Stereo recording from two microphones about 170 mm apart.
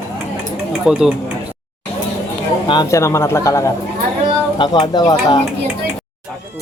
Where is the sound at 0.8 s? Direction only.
5° right (ahead or behind).